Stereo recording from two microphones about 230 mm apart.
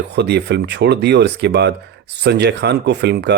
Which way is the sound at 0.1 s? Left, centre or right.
Right.